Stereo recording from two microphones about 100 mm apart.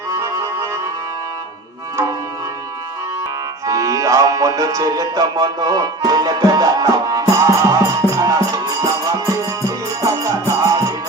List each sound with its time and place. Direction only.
0.1 s music: 25° right (ahead or behind)
3.7 s music: 35° right (ahead or behind)